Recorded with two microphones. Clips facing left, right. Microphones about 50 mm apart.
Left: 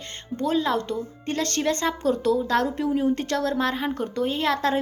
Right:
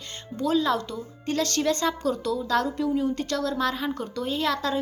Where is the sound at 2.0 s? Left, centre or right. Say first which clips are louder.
Left 4 dB; left.